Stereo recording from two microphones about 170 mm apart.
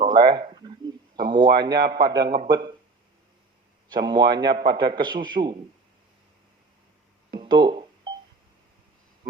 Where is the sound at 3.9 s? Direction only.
25° right (ahead or behind).